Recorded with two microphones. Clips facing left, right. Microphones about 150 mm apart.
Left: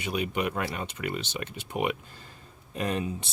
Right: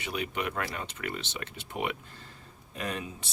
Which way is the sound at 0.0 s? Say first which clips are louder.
Left 4 dB; 15° left (ahead or behind).